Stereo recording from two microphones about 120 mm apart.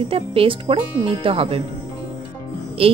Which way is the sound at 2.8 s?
50° right (ahead or behind).